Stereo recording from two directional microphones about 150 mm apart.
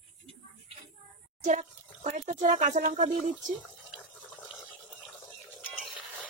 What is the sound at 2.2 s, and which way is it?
Speech, 50° right (ahead or behind).